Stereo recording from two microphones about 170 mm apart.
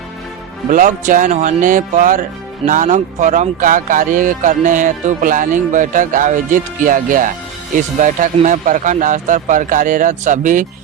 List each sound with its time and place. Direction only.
0.7 s speech: 50° right (ahead or behind)